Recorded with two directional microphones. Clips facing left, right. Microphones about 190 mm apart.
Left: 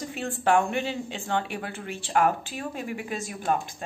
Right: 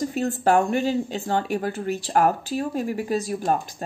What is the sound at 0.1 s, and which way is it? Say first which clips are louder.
A woman's voice: right 1 dB; 40° right (ahead or behind).